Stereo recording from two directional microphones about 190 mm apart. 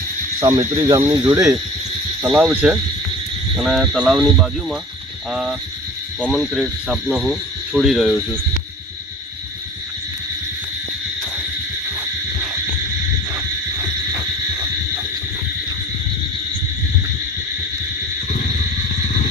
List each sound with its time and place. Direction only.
0.4 s speech: 20° right (ahead or behind); by 8.1 s centre (ahead or behind)